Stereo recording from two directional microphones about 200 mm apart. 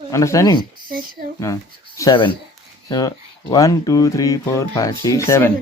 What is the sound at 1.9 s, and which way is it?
Speech, 20° left (ahead or behind).